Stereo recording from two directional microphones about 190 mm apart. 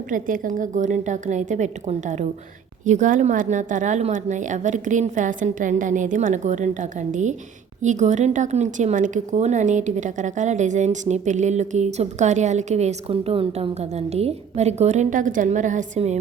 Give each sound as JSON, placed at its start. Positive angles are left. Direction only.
{"t": 0.1, "sound": "speech", "side_deg": -45}